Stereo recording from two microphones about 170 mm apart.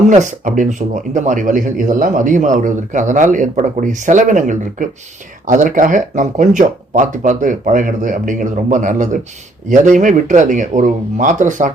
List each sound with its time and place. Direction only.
0.1 s speech: 45° right (ahead or behind)